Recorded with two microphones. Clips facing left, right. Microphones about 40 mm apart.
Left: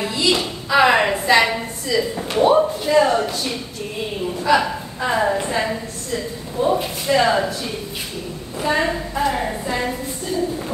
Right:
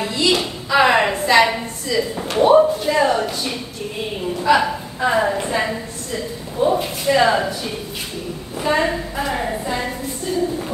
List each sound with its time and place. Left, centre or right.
0.0 s a woman's voice: centre
8.5 s a woman's voice: centre